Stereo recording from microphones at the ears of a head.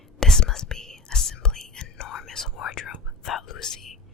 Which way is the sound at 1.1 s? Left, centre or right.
Left.